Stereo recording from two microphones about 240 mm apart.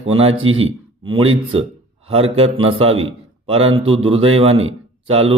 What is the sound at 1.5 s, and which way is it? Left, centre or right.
Speech, right.